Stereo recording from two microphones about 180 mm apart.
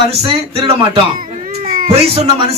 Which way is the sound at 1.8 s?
35° right (ahead or behind).